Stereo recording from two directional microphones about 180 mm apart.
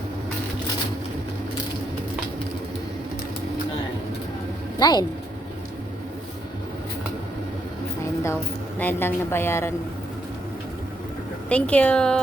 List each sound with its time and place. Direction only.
4.8 s speech: 20° left (ahead or behind)
8.0 s a sound: 15° left (ahead or behind)
8.8 s a woman's voice: 10° left (ahead or behind)
11.4 s a woman's voice: 5° left (ahead or behind)